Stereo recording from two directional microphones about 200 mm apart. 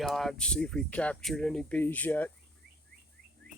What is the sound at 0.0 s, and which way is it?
Speech, centre (ahead or behind).